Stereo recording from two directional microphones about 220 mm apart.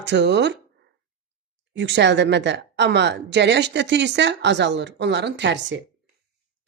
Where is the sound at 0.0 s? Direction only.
50° right (ahead or behind).